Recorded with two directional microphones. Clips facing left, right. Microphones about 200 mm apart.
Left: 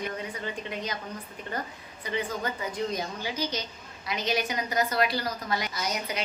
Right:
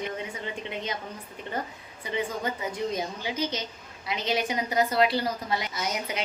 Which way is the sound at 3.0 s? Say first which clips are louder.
Right 2 dB; 20° right (ahead or behind).